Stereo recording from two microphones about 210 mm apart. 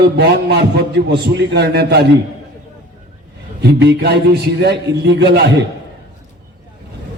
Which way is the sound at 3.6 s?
50° right (ahead or behind).